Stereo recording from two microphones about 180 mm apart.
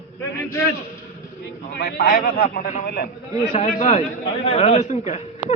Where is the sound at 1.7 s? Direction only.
60° left (ahead or behind).